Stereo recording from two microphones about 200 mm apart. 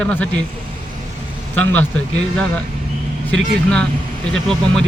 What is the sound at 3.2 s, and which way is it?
Speech, 5° left (ahead or behind).